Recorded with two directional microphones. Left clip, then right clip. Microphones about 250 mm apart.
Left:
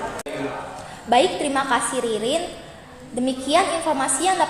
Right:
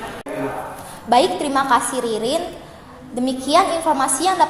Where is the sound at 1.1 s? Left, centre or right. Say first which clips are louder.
Right 2 dB; centre.